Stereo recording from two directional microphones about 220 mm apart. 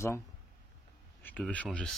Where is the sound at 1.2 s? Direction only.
5° left (ahead or behind).